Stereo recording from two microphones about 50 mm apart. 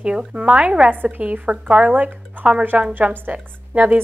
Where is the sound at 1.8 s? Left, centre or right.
Right.